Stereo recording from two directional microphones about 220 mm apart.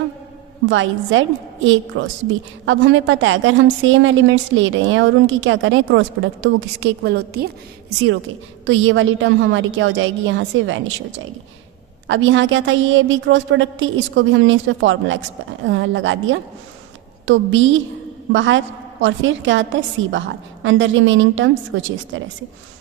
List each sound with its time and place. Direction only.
0.7 s a woman's voice: 60° right (ahead or behind)
12.0 s a woman's voice: 60° right (ahead or behind)